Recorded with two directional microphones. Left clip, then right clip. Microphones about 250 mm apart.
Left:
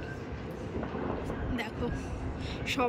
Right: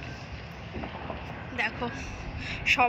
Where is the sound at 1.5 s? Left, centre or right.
Centre.